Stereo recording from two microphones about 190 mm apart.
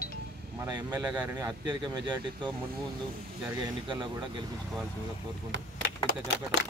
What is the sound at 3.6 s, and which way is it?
Speech, 25° right (ahead or behind).